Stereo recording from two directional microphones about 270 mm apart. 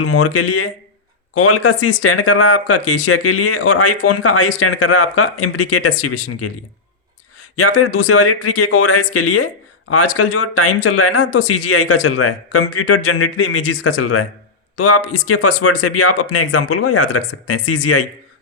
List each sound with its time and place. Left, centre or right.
0.0 s speech: left
7.5 s speech: left